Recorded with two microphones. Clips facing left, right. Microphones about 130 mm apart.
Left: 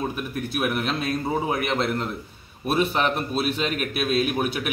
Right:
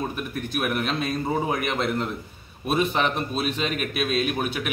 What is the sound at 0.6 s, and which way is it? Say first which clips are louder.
A man's voice: even; centre (ahead or behind).